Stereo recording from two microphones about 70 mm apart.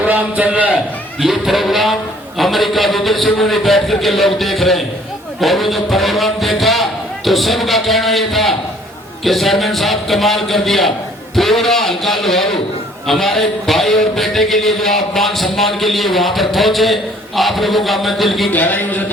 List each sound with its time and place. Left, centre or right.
0.0 s a man's voice: right
1.2 s a man's voice: centre
18.5 s speech: left